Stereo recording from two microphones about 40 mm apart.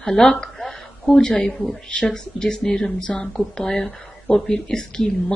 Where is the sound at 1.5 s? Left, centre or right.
Centre.